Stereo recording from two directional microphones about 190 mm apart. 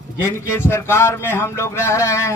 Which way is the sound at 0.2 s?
15° left (ahead or behind).